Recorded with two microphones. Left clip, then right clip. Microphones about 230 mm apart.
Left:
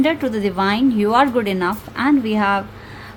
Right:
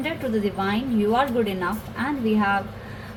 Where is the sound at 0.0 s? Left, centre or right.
Left.